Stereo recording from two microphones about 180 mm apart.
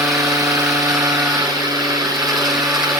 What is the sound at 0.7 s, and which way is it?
Vehicle, 20° right (ahead or behind).